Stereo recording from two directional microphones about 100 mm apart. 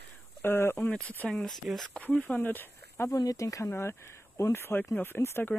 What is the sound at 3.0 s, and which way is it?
Speech, 35° left (ahead or behind).